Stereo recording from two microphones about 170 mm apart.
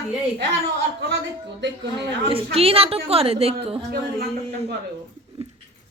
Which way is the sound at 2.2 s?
35° right (ahead or behind).